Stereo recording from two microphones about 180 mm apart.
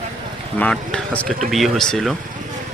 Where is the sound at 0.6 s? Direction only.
5° left (ahead or behind).